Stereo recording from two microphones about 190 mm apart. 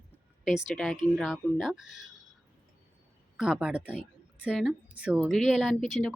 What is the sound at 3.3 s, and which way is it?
A woman's voice, 5° right (ahead or behind).